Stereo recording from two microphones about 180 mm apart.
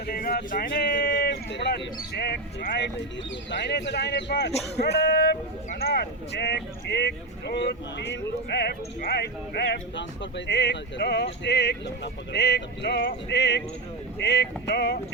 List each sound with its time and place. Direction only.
0.1 s speech: 55° left (ahead or behind)